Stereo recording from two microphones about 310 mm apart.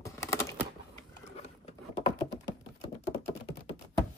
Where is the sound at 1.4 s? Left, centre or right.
Centre.